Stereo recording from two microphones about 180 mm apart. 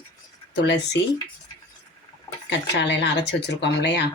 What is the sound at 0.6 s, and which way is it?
Speech, 70° left (ahead or behind).